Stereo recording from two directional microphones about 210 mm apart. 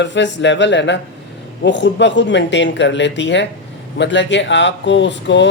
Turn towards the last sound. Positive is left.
turn(degrees=55)  # may be behind; listen again after turning